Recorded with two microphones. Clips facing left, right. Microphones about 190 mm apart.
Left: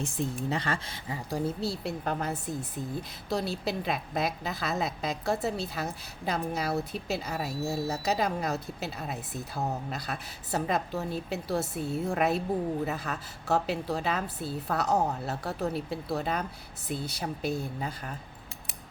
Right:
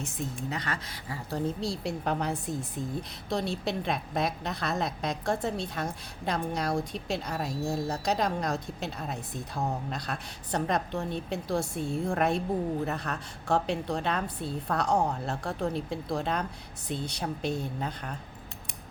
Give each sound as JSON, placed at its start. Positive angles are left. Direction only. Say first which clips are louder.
{"t": 0.2, "sound": "speech", "louder": "left 4 dB", "side_deg": 30}
{"t": 1.3, "sound": "speech", "louder": "even", "side_deg": 10}